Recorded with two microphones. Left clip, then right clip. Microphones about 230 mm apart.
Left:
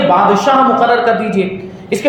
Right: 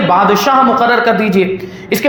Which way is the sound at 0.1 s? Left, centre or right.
Right.